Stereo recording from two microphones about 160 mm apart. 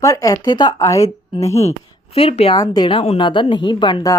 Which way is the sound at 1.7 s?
40° left (ahead or behind).